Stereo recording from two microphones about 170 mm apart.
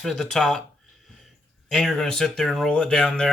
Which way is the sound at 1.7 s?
Centre (ahead or behind).